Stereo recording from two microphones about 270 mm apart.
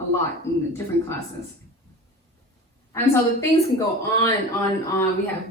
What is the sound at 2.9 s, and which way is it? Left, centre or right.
Speech, centre.